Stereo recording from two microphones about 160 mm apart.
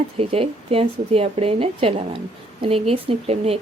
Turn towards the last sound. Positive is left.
turn(degrees=-40)  # may be behind; listen again after turning